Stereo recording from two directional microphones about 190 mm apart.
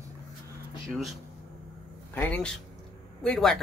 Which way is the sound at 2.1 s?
10° left (ahead or behind).